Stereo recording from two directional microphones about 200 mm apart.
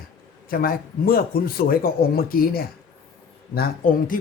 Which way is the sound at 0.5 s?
45° left (ahead or behind).